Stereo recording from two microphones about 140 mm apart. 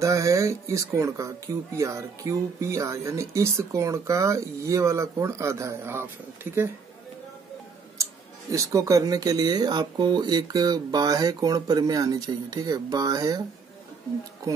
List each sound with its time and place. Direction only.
0.0 s speech: 25° right (ahead or behind)
8.0 s speech: 20° right (ahead or behind)